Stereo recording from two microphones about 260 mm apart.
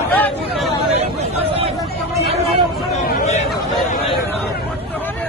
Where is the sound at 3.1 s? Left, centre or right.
Left.